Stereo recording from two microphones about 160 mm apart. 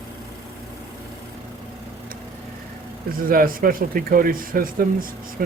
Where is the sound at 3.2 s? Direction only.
65° right (ahead or behind).